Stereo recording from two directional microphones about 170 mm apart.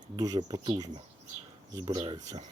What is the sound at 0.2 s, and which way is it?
Speech, 20° right (ahead or behind).